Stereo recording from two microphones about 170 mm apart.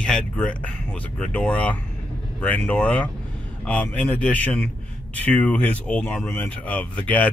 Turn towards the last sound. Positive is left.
turn(degrees=10)  # may be behind; listen again after turning